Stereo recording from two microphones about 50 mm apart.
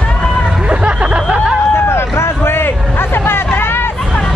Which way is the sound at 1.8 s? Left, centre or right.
Left.